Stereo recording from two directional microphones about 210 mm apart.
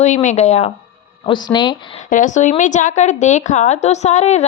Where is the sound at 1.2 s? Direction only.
20° left (ahead or behind).